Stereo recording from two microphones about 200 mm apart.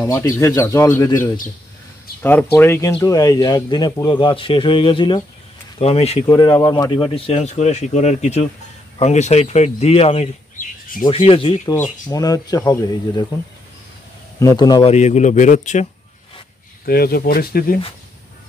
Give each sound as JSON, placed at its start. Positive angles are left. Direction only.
{"t": 0.0, "sound": "speech", "side_deg": 15}
{"t": 2.5, "sound": "speech", "side_deg": 10}
{"t": 6.2, "sound": "speech", "side_deg": 20}
{"t": 14.4, "sound": "speech", "side_deg": 20}
{"t": 14.9, "sound": "speech", "side_deg": 35}
{"t": 16.8, "sound": "speech", "side_deg": 50}